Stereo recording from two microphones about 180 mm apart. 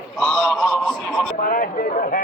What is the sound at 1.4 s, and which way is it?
Speech, 50° left (ahead or behind).